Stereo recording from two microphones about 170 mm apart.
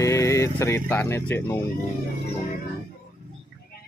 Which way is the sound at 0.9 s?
10° left (ahead or behind).